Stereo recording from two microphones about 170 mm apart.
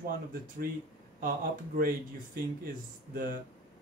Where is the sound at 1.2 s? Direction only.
55° right (ahead or behind).